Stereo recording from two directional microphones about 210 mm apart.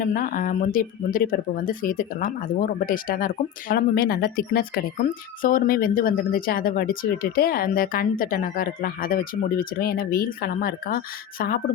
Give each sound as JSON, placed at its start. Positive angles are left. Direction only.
{"t": 0.0, "sound": "speech", "side_deg": 40}